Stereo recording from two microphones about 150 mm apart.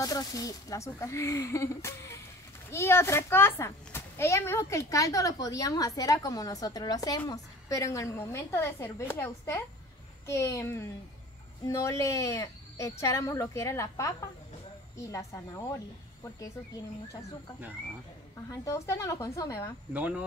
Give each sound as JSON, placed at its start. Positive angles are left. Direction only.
{"t": 0.0, "sound": "a child's voice", "side_deg": 25}
{"t": 18.5, "sound": "a child's voice", "side_deg": 20}
{"t": 19.9, "sound": "speech", "side_deg": -10}